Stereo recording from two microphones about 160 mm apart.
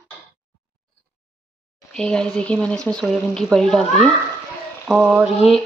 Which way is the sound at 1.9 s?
5° left (ahead or behind).